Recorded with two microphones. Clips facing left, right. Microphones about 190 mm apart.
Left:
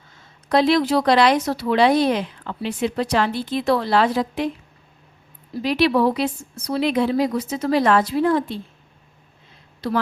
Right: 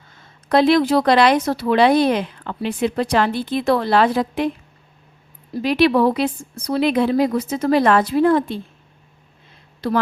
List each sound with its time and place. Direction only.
0.4 s speech: 55° right (ahead or behind)
5.6 s speech: 55° right (ahead or behind)
9.8 s speech: 55° right (ahead or behind)